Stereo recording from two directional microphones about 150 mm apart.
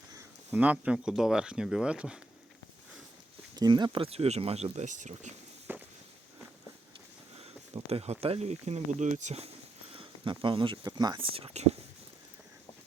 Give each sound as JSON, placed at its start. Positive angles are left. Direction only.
{"t": 0.1, "sound": "speech", "side_deg": -15}
{"t": 3.5, "sound": "speech", "side_deg": -30}
{"t": 5.7, "sound": "firecracker", "side_deg": -15}
{"t": 7.9, "sound": "speech", "side_deg": -45}
{"t": 9.9, "sound": "speech", "side_deg": -35}